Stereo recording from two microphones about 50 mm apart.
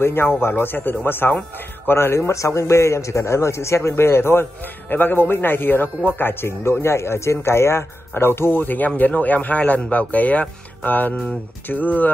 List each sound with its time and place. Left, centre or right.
0.0 s a man's voice: left